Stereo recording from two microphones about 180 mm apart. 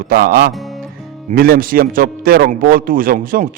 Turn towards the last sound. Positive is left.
turn(degrees=-50)  # may be behind; listen again after turning